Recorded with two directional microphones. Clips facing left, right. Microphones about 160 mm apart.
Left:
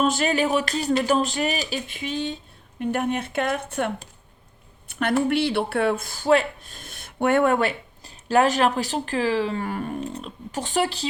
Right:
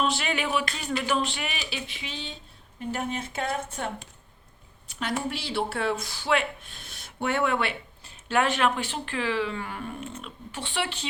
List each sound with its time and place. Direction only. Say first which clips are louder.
0.0 s speech: left 6 dB; 45° left (ahead or behind)
2.7 s a woman's voice: left 7 dB; 60° left (ahead or behind); by 11.0 s 40° left (ahead or behind)